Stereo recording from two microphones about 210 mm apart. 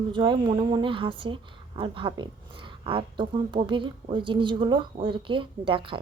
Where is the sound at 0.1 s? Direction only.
25° right (ahead or behind).